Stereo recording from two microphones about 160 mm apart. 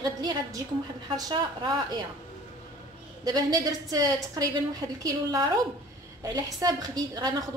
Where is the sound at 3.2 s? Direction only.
25° right (ahead or behind).